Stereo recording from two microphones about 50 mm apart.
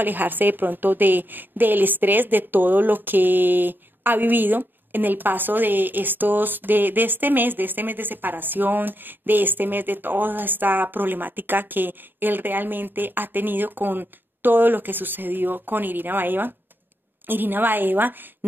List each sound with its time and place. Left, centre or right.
0.0 s a woman's voice: right